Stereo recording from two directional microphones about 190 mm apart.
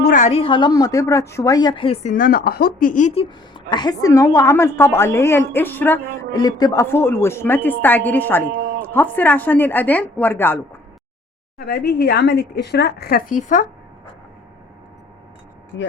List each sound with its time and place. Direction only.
0.0 s a woman's voice: 40° left (ahead or behind)
2.1 s speech: 50° left (ahead or behind)
3.2 s a woman's voice: 25° left (ahead or behind)
11.5 s speech: 55° left (ahead or behind)
15.7 s speech: 85° left